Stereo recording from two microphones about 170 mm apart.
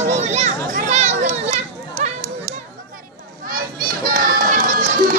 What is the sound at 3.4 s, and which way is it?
Children playing, 55° right (ahead or behind).